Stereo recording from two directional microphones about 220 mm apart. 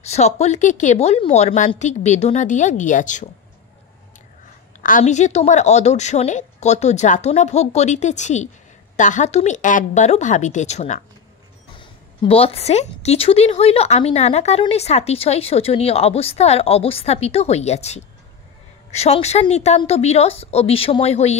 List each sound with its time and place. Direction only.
0.0 s a woman's voice: 30° left (ahead or behind)
4.8 s a woman's voice: 35° left (ahead or behind)